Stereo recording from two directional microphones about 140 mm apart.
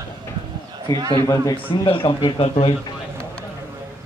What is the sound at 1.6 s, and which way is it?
Speech, 40° left (ahead or behind).